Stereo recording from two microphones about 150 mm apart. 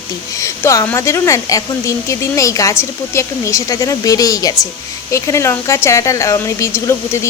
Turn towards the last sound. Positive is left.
turn(degrees=20)  # may be behind; listen again after turning